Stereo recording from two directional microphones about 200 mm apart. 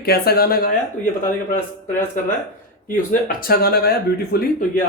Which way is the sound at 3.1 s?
45° left (ahead or behind).